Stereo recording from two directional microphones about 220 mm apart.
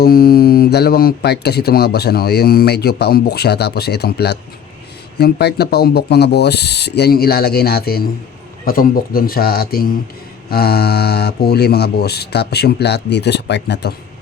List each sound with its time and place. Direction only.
0.0 s speech: 45° left (ahead or behind)